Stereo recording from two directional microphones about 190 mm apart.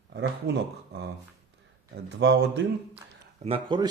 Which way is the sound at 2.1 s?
65° right (ahead or behind).